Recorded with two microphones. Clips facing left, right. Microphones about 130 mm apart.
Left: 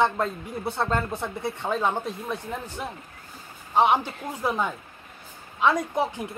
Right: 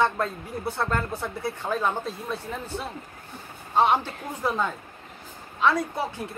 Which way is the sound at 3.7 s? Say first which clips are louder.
Left 1 dB; 15° left (ahead or behind).